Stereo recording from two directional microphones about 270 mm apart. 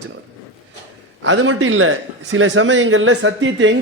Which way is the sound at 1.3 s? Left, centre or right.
Right.